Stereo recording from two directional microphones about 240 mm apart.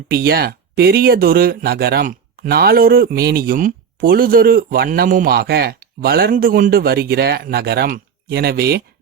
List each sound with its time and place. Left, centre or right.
0.1 s speech: right